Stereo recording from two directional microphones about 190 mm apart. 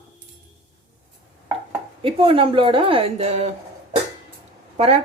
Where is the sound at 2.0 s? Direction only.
25° right (ahead or behind).